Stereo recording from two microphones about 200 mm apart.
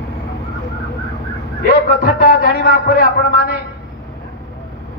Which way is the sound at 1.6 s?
45° left (ahead or behind).